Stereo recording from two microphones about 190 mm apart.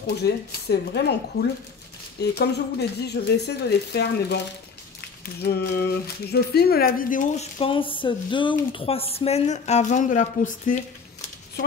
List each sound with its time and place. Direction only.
0.0 s speech: 55° left (ahead or behind)
2.3 s speech: 60° left (ahead or behind)
7.5 s speech: 30° left (ahead or behind)